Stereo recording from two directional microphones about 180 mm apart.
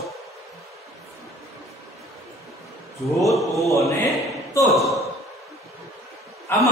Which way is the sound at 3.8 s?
15° left (ahead or behind).